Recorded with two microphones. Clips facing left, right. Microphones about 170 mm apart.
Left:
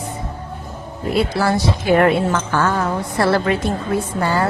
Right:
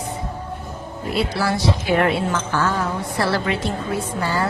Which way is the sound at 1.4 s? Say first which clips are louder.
Left 3 dB; 50° left (ahead or behind).